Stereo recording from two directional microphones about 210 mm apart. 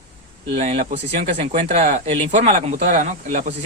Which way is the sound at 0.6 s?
30° right (ahead or behind).